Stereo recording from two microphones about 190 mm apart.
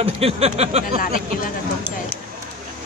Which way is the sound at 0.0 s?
30° right (ahead or behind).